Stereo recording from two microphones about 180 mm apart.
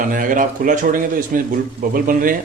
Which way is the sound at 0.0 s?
50° right (ahead or behind).